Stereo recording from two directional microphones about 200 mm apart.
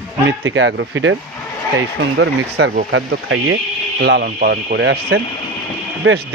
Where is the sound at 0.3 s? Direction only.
70° right (ahead or behind).